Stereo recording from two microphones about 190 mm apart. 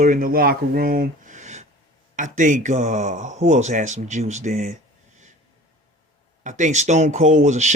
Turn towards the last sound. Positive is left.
turn(degrees=-40)  # may be behind; listen again after turning